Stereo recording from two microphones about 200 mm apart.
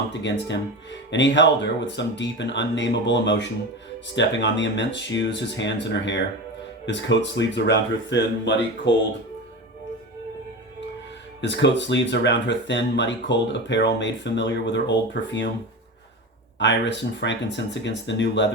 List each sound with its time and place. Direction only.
0.1 s speech: 60° left (ahead or behind)
11.3 s speech: 60° left (ahead or behind)
16.6 s speech: 60° left (ahead or behind)